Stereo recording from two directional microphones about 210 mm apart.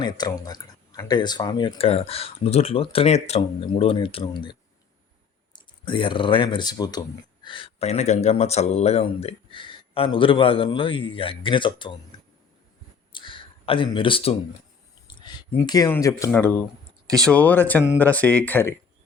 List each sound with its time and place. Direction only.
0.0 s speech: 20° left (ahead or behind)
5.5 s speech: 20° left (ahead or behind)
13.1 s a sound: 25° left (ahead or behind)
15.0 s speech: 20° left (ahead or behind)